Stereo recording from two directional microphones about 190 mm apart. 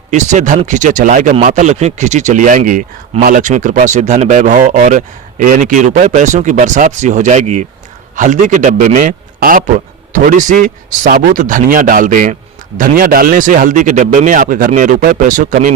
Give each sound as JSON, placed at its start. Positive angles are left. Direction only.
{"t": 0.1, "sound": "a man's voice", "side_deg": -40}